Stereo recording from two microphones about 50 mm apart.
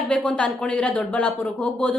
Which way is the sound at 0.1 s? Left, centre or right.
Centre.